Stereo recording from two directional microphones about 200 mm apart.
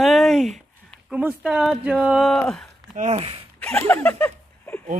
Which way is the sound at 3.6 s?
5° left (ahead or behind).